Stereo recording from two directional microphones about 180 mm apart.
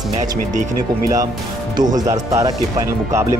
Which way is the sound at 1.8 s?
20° right (ahead or behind).